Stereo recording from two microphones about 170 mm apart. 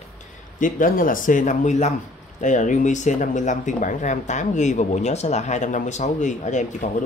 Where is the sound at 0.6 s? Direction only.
55° left (ahead or behind).